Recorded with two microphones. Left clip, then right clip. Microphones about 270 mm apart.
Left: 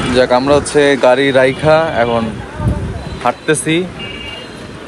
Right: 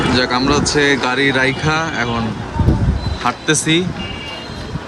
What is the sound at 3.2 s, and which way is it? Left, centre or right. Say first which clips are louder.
Speech: left 2 dB; centre.